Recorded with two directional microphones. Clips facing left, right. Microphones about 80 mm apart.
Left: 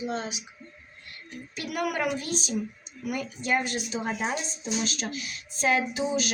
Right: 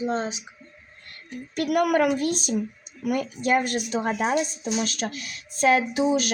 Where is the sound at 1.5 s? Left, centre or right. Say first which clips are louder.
Right 9 dB; right.